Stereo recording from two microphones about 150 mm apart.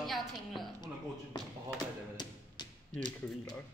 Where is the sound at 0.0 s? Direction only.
Centre (ahead or behind).